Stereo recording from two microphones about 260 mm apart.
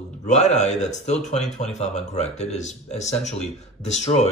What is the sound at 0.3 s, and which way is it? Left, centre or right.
Speech, left.